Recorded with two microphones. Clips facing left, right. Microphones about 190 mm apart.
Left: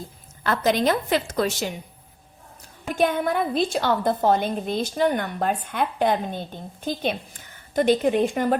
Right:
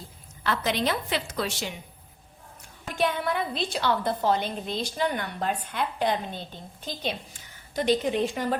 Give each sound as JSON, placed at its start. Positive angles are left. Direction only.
{"t": 0.4, "sound": "a woman's voice", "side_deg": 45}
{"t": 2.9, "sound": "a woman's voice", "side_deg": 50}